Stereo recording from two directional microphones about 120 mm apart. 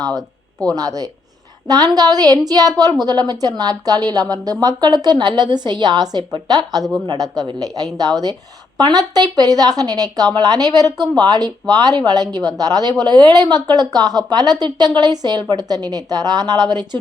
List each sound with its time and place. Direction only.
0.1 s speech: 5° left (ahead or behind)
0.8 s speech: 30° right (ahead or behind)